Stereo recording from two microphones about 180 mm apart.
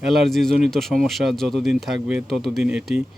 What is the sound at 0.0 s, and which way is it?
Speech, centre (ahead or behind).